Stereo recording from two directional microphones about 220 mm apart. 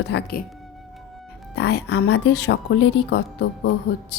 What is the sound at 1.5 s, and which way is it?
Speech, 50° left (ahead or behind).